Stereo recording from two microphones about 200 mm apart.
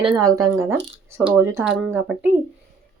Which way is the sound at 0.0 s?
20° right (ahead or behind).